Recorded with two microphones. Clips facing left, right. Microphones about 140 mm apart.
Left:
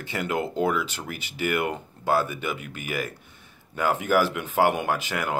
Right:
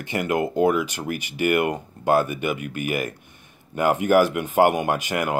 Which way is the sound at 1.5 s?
15° right (ahead or behind).